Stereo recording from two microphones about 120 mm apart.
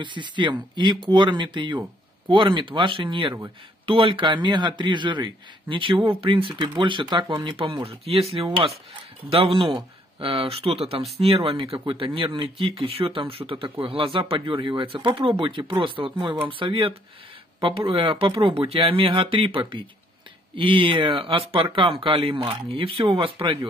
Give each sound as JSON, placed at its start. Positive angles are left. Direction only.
{"t": 0.0, "sound": "speech", "side_deg": -40}